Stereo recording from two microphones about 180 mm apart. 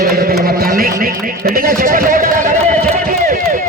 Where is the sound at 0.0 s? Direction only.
55° right (ahead or behind).